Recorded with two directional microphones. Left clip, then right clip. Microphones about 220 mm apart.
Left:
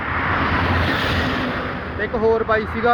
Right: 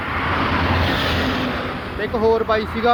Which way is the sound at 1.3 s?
55° right (ahead or behind).